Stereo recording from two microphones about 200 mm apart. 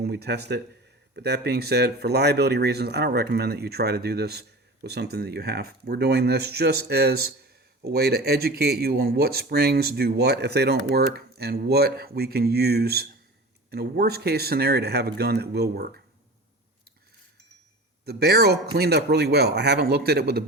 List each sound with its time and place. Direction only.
0.0 s speech: 55° right (ahead or behind)
18.0 s speech: 55° right (ahead or behind)